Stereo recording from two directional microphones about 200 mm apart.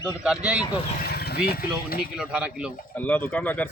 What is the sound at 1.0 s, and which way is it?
Speech, 55° left (ahead or behind).